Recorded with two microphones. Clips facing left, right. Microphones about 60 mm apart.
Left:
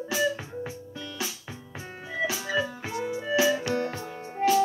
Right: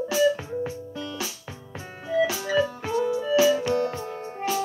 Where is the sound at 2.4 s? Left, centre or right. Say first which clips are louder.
Right 5 dB; centre.